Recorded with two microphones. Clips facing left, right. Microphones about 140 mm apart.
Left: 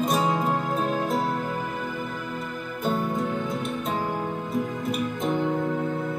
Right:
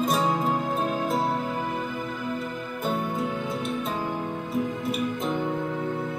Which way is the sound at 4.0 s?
50° left (ahead or behind).